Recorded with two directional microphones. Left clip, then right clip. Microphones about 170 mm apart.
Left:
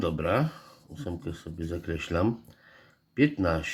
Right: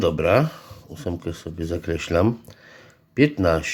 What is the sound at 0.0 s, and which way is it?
Speech, 35° right (ahead or behind).